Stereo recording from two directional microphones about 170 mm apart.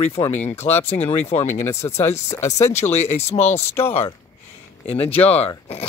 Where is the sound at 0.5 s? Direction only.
10° left (ahead or behind).